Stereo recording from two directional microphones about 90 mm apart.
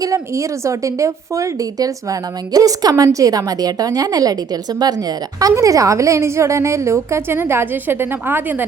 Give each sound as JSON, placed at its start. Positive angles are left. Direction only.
{"t": 0.0, "sound": "speech", "side_deg": -40}